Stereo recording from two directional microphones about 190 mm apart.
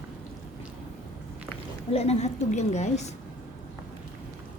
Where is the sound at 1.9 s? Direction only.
35° left (ahead or behind).